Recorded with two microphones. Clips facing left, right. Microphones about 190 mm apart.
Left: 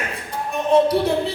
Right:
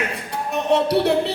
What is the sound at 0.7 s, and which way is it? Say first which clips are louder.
Speech: left 3 dB; 70° right (ahead or behind).